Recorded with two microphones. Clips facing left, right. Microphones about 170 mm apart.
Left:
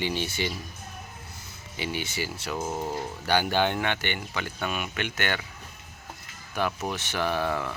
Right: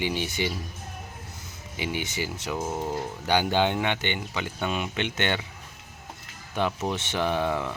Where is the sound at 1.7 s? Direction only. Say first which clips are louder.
Right 1 dB; 15° right (ahead or behind).